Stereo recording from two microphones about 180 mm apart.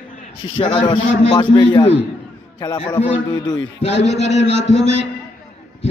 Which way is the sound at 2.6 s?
25° left (ahead or behind).